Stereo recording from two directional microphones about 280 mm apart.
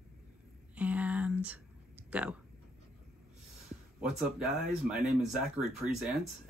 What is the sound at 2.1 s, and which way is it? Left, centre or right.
Speech, centre.